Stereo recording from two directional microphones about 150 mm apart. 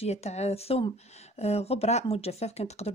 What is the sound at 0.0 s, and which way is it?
Speech, 45° left (ahead or behind).